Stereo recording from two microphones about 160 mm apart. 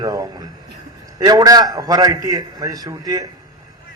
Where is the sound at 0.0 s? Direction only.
20° right (ahead or behind).